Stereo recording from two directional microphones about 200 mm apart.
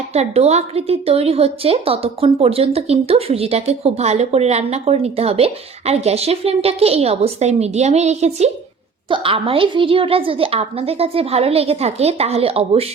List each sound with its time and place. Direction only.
0.1 s a woman's voice: 30° right (ahead or behind)